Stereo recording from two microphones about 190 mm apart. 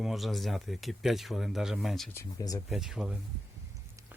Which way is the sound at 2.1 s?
20° left (ahead or behind).